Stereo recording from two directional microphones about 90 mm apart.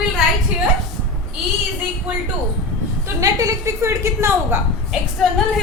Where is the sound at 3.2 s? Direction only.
40° right (ahead or behind).